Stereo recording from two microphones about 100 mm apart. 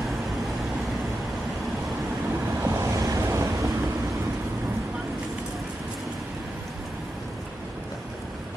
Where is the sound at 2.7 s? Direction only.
30° right (ahead or behind).